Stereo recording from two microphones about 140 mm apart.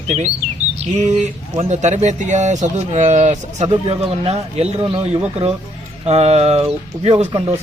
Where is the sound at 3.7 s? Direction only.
45° right (ahead or behind).